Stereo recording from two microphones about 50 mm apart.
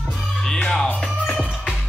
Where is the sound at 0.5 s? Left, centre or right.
Centre.